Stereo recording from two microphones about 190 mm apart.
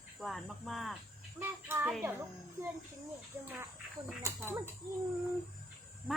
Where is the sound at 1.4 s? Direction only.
10° right (ahead or behind).